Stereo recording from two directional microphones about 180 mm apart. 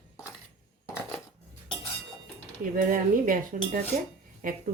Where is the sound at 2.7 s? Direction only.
50° right (ahead or behind).